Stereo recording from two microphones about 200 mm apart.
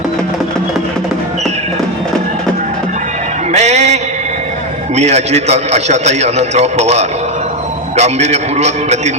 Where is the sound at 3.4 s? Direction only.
35° right (ahead or behind).